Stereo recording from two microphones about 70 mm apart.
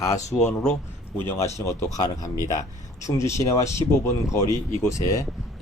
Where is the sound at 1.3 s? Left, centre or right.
Left.